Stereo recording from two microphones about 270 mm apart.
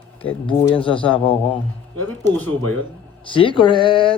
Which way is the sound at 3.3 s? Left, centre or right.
Centre.